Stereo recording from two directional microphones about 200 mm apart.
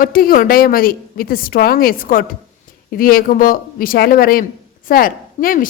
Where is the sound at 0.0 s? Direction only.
45° left (ahead or behind).